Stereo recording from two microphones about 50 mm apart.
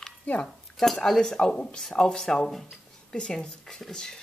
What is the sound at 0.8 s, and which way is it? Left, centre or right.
Speech, centre.